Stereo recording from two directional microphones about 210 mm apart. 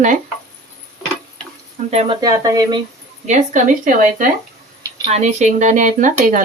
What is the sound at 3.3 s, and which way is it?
Speech, 35° right (ahead or behind).